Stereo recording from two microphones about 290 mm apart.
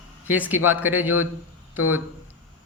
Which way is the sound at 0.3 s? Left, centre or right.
Centre.